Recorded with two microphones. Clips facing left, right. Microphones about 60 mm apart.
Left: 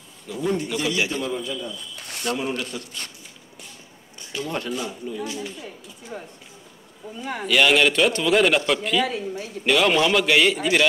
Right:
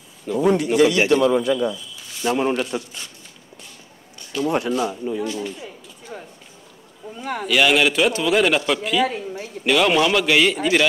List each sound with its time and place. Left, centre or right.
0.4 s a man's voice: right
2.0 s a sound: left
2.3 s speech: right
4.4 s speech: right
6.1 s a sound: centre
7.2 s speech: right
7.4 s a man's voice: centre